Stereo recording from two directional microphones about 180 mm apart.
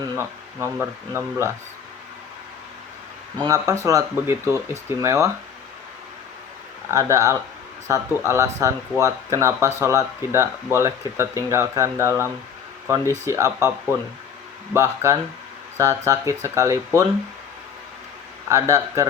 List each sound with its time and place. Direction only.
0.0 s speech: 15° right (ahead or behind)
3.4 s speech: 20° right (ahead or behind)
6.9 s speech: 20° right (ahead or behind)
14.7 s speech: 15° right (ahead or behind)